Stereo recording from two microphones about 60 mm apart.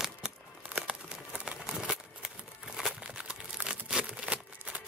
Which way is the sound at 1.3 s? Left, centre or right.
Right.